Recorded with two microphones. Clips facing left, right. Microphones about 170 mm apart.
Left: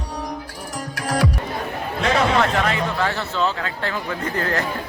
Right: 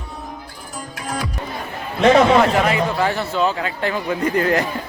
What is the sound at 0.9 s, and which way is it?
Music, 85° left.